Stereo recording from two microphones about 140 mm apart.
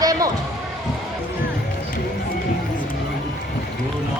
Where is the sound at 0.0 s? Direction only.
25° right (ahead or behind).